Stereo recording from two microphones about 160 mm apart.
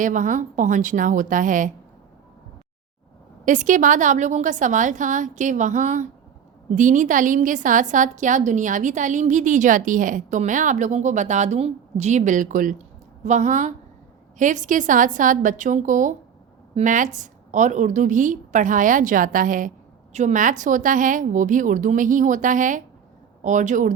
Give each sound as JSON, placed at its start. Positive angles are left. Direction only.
{"t": 0.0, "sound": "a woman's voice", "side_deg": -55}
{"t": 3.4, "sound": "a woman's voice", "side_deg": -50}